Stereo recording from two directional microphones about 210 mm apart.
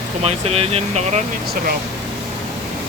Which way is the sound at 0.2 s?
30° right (ahead or behind).